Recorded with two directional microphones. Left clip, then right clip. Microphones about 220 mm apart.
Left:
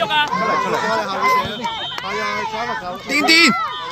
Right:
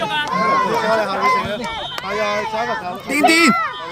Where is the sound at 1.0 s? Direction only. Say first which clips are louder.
Right 1 dB; 50° right (ahead or behind).